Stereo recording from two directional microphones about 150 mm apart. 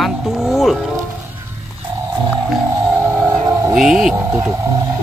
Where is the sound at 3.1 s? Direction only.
15° right (ahead or behind).